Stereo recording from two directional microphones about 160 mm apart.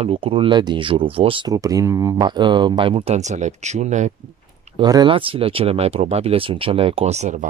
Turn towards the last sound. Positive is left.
turn(degrees=-45)  # may be behind; listen again after turning